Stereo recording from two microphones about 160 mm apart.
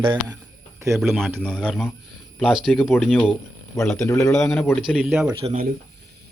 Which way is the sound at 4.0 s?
20° left (ahead or behind).